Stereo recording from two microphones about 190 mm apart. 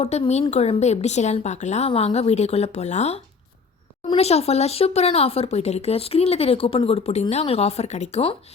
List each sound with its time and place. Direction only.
0.0 s speech: 35° left (ahead or behind)